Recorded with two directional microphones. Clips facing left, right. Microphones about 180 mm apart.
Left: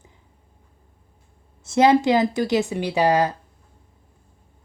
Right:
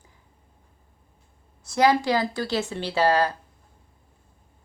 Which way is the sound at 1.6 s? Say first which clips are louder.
Left 4 dB; 25° left (ahead or behind).